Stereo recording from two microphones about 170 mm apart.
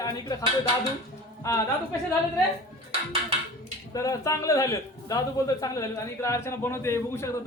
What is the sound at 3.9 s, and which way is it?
A man's voice, 20° left (ahead or behind).